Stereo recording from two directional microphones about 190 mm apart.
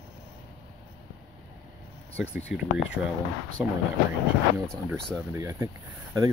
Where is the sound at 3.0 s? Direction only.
15° right (ahead or behind).